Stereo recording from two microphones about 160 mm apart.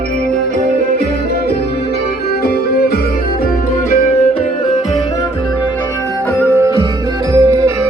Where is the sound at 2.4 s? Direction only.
75° left (ahead or behind).